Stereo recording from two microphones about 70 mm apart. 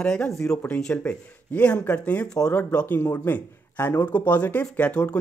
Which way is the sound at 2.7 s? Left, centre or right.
Left.